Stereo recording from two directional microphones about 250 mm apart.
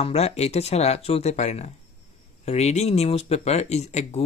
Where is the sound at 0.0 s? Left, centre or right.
Left.